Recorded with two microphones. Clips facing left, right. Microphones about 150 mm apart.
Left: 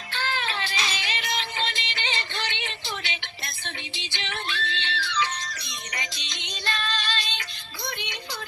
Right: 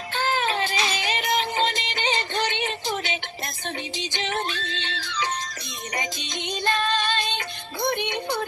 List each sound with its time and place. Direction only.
0.1 s music: 45° right (ahead or behind)